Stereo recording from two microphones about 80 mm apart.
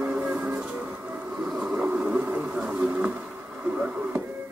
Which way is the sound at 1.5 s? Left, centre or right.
Centre.